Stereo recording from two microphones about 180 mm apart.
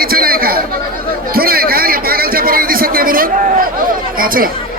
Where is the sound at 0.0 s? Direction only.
55° right (ahead or behind).